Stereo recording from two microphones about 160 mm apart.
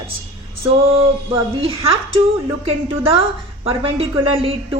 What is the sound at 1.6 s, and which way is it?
A woman's voice, 35° right (ahead or behind).